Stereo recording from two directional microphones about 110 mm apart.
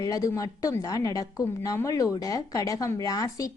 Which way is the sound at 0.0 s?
30° left (ahead or behind).